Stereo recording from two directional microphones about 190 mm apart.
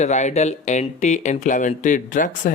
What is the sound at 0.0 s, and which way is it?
Speech, 40° left (ahead or behind).